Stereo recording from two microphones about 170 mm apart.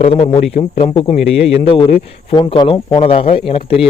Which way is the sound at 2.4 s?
30° left (ahead or behind).